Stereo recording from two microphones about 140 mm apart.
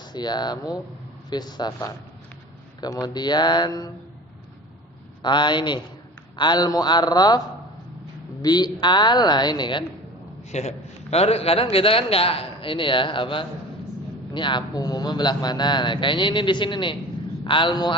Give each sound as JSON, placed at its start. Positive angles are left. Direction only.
{"t": 0.0, "sound": "a man's voice", "side_deg": 30}
{"t": 2.8, "sound": "speech", "side_deg": 30}
{"t": 5.2, "sound": "a man's voice", "side_deg": 35}
{"t": 10.5, "sound": "a man's voice", "side_deg": 50}